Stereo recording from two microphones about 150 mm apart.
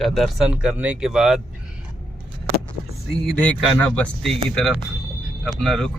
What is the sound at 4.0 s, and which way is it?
Speech, centre (ahead or behind).